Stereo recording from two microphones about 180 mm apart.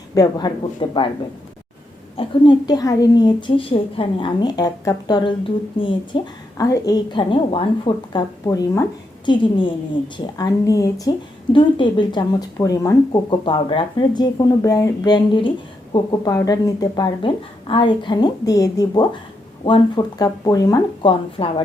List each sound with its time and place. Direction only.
0.1 s speech: 20° left (ahead or behind)
2.1 s speech: 25° left (ahead or behind)